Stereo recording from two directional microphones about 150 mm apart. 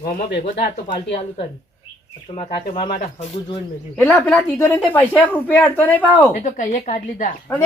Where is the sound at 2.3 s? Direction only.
40° left (ahead or behind).